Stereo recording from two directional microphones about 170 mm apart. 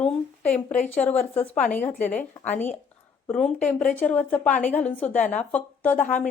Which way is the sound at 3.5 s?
50° left (ahead or behind).